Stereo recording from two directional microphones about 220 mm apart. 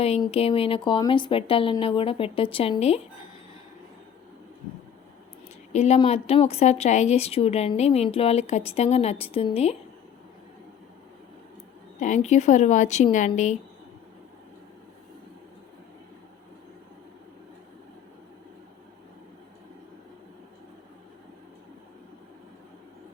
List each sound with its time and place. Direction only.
0.0 s speech: 25° left (ahead or behind)
5.7 s speech: 30° left (ahead or behind)
11.9 s speech: 35° left (ahead or behind)